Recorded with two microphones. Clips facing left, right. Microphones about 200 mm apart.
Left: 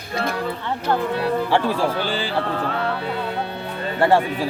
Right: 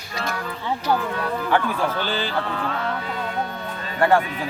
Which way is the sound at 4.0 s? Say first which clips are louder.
Left 1 dB; 25° left (ahead or behind).